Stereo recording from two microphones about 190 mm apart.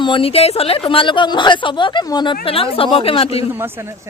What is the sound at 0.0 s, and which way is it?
A woman's voice, 30° left (ahead or behind).